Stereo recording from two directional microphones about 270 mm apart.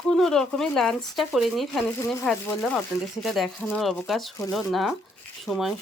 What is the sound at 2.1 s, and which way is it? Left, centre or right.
Speech, centre.